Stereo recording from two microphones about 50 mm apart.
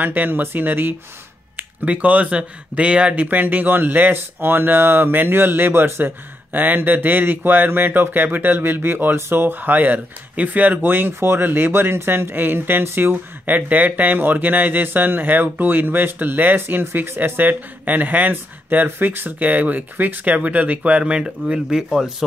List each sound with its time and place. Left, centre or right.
0.0 s speech: right
1.6 s speech: right
3.3 s speech: right
6.6 s speech: right
13.1 s speech: right; by 22.1 s centre